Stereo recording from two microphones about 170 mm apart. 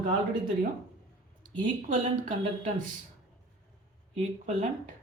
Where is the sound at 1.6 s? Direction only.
50° right (ahead or behind).